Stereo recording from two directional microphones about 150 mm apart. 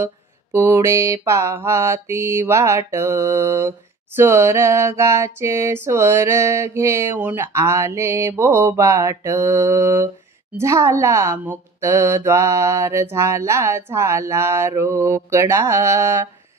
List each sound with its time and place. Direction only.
0.0 s mantra: 15° right (ahead or behind)
10.6 s speech: 20° right (ahead or behind)